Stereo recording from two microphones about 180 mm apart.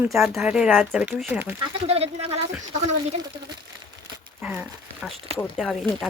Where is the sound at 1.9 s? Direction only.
35° right (ahead or behind).